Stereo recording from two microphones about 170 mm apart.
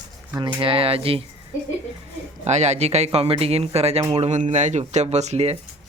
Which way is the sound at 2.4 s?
40° right (ahead or behind).